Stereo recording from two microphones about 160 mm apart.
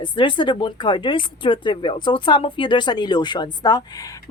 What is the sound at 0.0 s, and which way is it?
A woman's voice, 30° left (ahead or behind).